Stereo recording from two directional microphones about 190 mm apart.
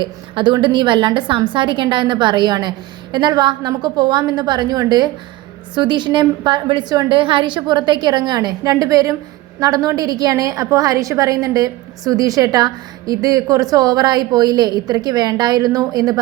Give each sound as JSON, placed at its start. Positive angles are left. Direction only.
{"t": 0.0, "sound": "a woman's voice", "side_deg": -25}